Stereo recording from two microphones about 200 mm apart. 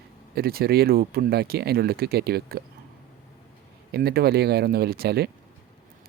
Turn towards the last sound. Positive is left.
turn(degrees=-50)  # may be behind; listen again after turning